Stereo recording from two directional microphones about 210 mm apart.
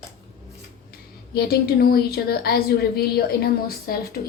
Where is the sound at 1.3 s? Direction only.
45° left (ahead or behind).